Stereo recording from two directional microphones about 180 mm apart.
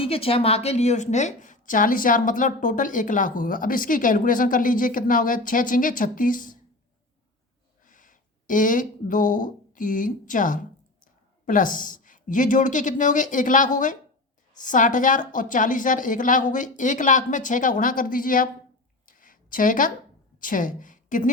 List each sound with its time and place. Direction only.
0.0 s a woman's voice: 30° left (ahead or behind); by 6.6 s 50° left (ahead or behind)
7.9 s a woman's voice: 45° left (ahead or behind)
19.0 s a sound: 50° left (ahead or behind)
20.4 s a woman's voice: 45° left (ahead or behind)